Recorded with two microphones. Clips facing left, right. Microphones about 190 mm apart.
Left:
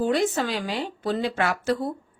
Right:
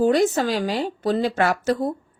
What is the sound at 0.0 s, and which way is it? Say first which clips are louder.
A woman's voice: right 5 dB; 40° right (ahead or behind).